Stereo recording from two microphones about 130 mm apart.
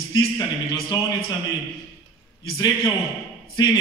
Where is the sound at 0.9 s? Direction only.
30° left (ahead or behind).